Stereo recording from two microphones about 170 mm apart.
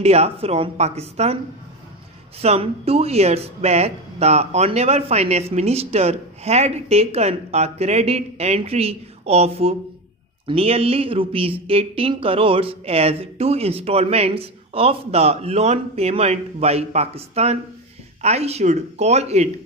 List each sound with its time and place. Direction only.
0.0 s speech: 35° right (ahead or behind)
2.4 s speech: 35° right (ahead or behind)